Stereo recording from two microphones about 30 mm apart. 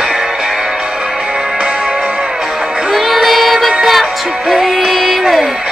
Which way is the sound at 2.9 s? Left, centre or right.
Centre.